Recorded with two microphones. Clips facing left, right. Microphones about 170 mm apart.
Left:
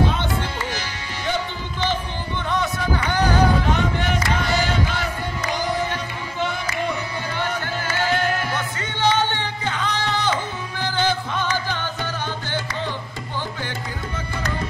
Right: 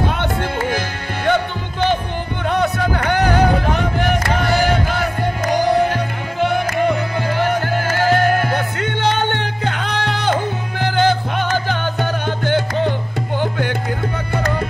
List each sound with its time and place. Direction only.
0.0 s music: 60° right (ahead or behind)